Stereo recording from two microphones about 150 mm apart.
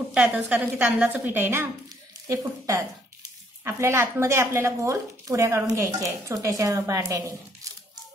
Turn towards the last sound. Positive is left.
turn(degrees=-20)  # may be behind; listen again after turning